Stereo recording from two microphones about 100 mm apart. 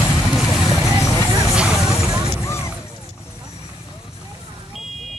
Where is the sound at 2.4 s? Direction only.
25° left (ahead or behind).